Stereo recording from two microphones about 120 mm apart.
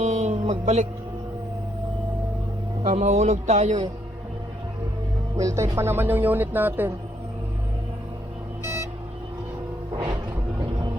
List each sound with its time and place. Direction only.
0.0 s music: 75° right (ahead or behind)
2.8 s speech: 70° right (ahead or behind)
5.4 s speech: 25° right (ahead or behind)
8.6 s vehicle: 25° right (ahead or behind)